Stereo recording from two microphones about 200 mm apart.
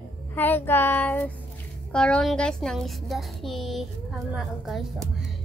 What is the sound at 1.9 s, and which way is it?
A child's voice, 5° left (ahead or behind).